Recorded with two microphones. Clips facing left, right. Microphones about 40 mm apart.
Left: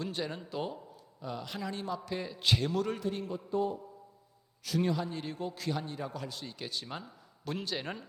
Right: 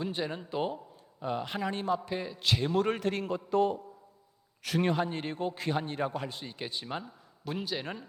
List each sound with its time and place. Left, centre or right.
0.0 s a man's voice: centre; by 2.0 s right
2.1 s speech: centre
2.7 s a man's voice: right
3.0 s a man's voice: right
4.6 s a man's voice: right
6.4 s speech: right
7.0 s a man's voice: centre